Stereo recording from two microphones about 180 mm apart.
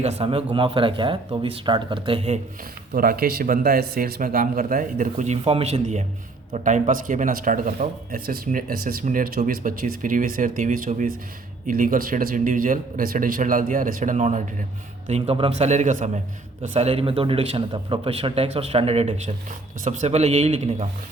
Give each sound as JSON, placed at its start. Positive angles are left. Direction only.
{"t": 0.0, "sound": "speech", "side_deg": -35}
{"t": 2.9, "sound": "a man's voice", "side_deg": -55}